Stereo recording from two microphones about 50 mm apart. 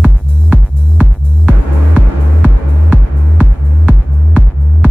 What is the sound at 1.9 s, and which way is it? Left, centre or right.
Music, right.